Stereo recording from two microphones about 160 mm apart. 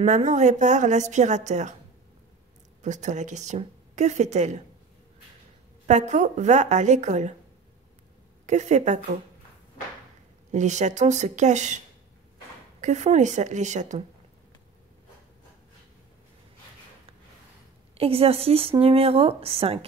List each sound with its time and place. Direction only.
0.0 s speech: 45° right (ahead or behind)
2.8 s speech: 50° right (ahead or behind)
5.9 s speech: 50° right (ahead or behind)
8.5 s speech: 45° right (ahead or behind)
10.5 s speech: 50° right (ahead or behind)
12.8 s speech: 45° right (ahead or behind)
17.9 s speech: 35° right (ahead or behind)